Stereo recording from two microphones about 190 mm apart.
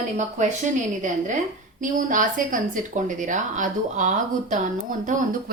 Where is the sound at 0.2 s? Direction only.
40° right (ahead or behind).